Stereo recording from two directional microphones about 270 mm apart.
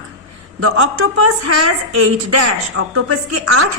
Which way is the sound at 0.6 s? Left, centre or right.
Right.